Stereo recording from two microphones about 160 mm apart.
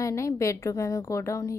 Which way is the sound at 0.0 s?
20° left (ahead or behind).